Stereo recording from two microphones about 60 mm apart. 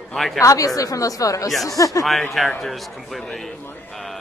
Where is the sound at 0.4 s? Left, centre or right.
Left.